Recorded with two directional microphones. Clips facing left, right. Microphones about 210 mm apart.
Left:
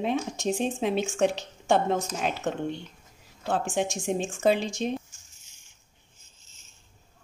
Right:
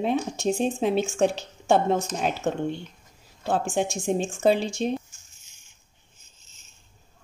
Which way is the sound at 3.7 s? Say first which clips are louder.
Right 2 dB; 30° right (ahead or behind).